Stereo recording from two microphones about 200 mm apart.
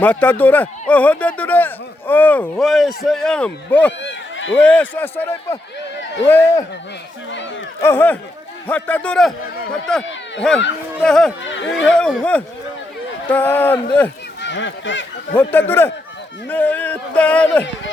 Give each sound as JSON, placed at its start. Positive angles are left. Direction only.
{"t": 0.0, "sound": "speech", "side_deg": 10}
{"t": 4.0, "sound": "run", "side_deg": 70}
{"t": 4.5, "sound": "speech", "side_deg": 5}
{"t": 7.8, "sound": "speech", "side_deg": 10}
{"t": 11.0, "sound": "speech", "side_deg": 5}
{"t": 11.4, "sound": "speech", "side_deg": 65}
{"t": 11.9, "sound": "speech", "side_deg": 5}
{"t": 14.4, "sound": "speech", "side_deg": 65}
{"t": 15.4, "sound": "speech", "side_deg": 10}